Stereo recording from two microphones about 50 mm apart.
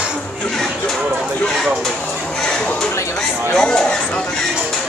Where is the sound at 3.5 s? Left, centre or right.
Centre.